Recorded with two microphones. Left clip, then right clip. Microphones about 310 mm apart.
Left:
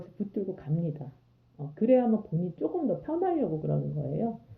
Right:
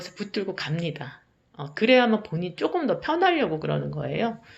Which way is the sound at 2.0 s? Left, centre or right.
Right.